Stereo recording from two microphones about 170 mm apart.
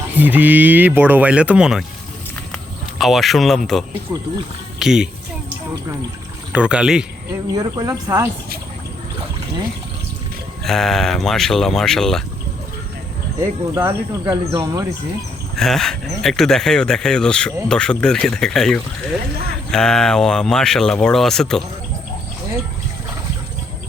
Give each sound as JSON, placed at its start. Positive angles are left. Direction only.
{"t": 0.2, "sound": "speech", "side_deg": -10}
{"t": 3.0, "sound": "speech", "side_deg": 0}
{"t": 4.1, "sound": "speech", "side_deg": -20}
{"t": 4.8, "sound": "speech", "side_deg": -5}
{"t": 6.5, "sound": "speech", "side_deg": -5}
{"t": 7.5, "sound": "speech", "side_deg": -20}
{"t": 10.6, "sound": "speech", "side_deg": 0}
{"t": 13.4, "sound": "speech", "side_deg": -15}
{"t": 15.5, "sound": "speech", "side_deg": 0}